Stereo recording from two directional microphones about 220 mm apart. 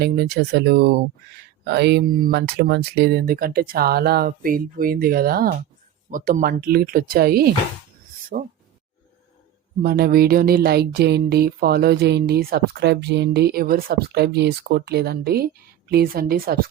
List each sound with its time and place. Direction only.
0.0 s speech: 45° right (ahead or behind)
9.8 s speech: 45° right (ahead or behind)